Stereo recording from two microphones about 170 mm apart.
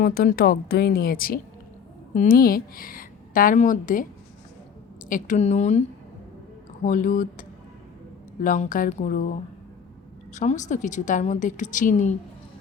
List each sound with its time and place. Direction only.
0.0 s a woman's voice: 60° left (ahead or behind)
5.0 s speech: 50° left (ahead or behind)
6.8 s a woman's voice: 50° left (ahead or behind)
10.3 s a woman's voice: 45° left (ahead or behind)